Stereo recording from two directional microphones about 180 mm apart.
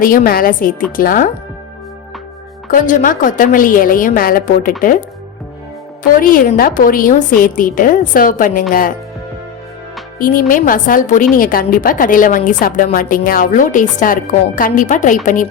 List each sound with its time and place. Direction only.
0.0 s a woman's voice: 50° left (ahead or behind)
2.6 s a woman's voice: 45° left (ahead or behind)
10.2 s a woman's voice: 50° left (ahead or behind)